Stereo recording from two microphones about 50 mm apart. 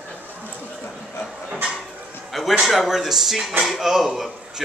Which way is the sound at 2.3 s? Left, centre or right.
Centre.